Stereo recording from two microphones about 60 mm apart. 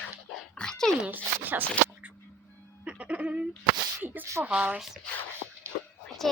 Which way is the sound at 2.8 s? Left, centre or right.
Right.